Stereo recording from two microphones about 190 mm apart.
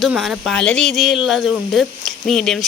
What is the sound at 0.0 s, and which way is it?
Speech, centre (ahead or behind).